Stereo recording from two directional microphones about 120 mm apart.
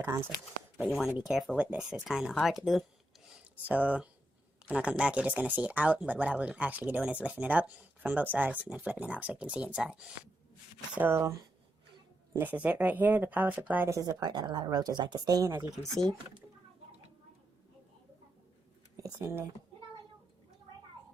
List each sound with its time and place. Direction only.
0.0 s speech: 25° right (ahead or behind)
0.9 s speech: centre (ahead or behind)
3.7 s speech: 10° right (ahead or behind)
12.3 s speech: 15° right (ahead or behind)
13.9 s speech: 30° right (ahead or behind)
19.0 s speech: 25° right (ahead or behind)